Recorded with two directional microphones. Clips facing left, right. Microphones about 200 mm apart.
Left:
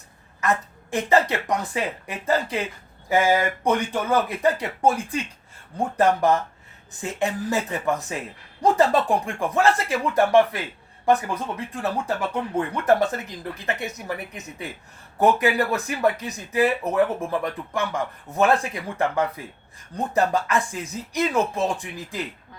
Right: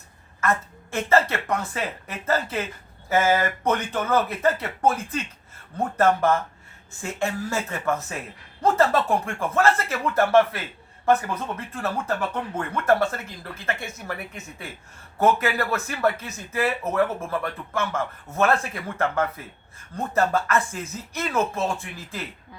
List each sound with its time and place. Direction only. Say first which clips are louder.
0.4 s speech: left 1 dB; 15° left (ahead or behind)